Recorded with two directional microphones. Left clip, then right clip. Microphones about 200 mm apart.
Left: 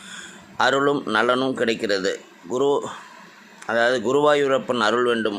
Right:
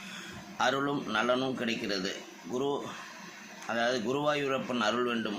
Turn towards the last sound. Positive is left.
turn(degrees=50)  # may be behind; listen again after turning